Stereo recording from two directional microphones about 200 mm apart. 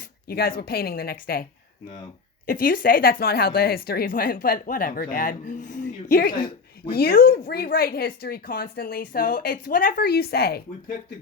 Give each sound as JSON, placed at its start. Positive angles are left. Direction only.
{"t": 0.3, "sound": "speech", "side_deg": 50}
{"t": 2.5, "sound": "speech", "side_deg": 45}
{"t": 6.3, "sound": "a sound", "side_deg": 25}
{"t": 6.9, "sound": "speech", "side_deg": 50}